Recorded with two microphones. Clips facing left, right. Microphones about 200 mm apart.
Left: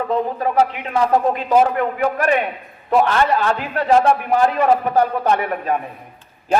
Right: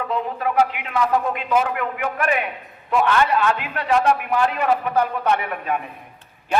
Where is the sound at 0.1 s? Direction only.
35° left (ahead or behind).